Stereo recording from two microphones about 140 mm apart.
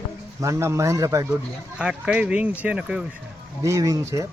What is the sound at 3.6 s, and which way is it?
Speech, 25° right (ahead or behind).